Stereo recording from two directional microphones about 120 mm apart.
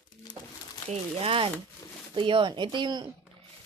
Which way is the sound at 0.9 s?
50° right (ahead or behind).